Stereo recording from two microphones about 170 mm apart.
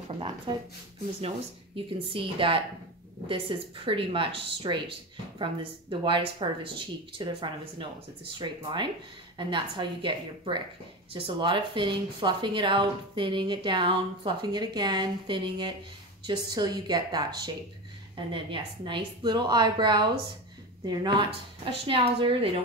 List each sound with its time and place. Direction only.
0.1 s speech: 30° right (ahead or behind)
2.0 s a woman's voice: 30° right (ahead or behind)